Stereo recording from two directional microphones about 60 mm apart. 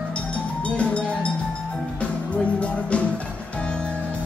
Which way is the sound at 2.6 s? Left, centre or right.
Left.